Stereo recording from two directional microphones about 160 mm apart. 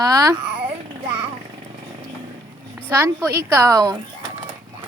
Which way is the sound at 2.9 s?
15° right (ahead or behind).